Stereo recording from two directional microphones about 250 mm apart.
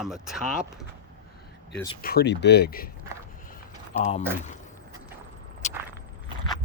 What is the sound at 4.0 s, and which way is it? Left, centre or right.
Speech, left.